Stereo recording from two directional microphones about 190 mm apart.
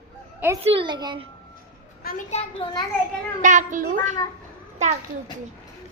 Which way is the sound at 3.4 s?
40° right (ahead or behind).